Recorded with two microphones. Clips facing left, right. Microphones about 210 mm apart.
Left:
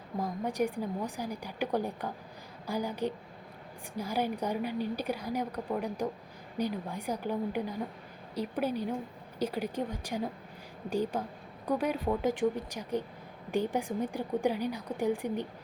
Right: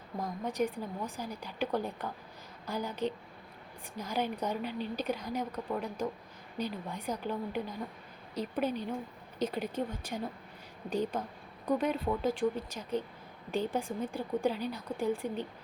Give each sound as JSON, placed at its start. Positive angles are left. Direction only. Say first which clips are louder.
{"t": 0.2, "sound": "a woman's voice", "louder": "left 2 dB", "side_deg": 10}